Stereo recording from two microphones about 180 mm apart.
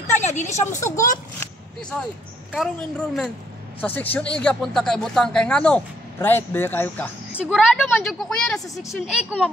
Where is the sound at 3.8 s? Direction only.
10° left (ahead or behind).